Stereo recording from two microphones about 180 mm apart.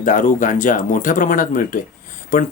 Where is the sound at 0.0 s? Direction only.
45° left (ahead or behind).